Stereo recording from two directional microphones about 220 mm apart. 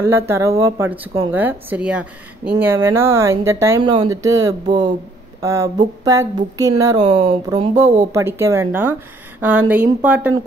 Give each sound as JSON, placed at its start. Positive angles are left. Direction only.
{"t": 0.0, "sound": "speech", "side_deg": -10}
{"t": 7.1, "sound": "speech", "side_deg": -30}
{"t": 10.0, "sound": "speech", "side_deg": -5}